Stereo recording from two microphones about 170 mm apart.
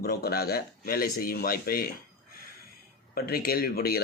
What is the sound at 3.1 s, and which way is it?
Speech, 65° left (ahead or behind).